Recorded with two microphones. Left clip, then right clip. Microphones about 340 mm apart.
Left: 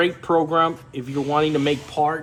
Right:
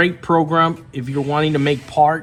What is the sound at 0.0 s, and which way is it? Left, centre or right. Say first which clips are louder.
Speech: right 3 dB; right.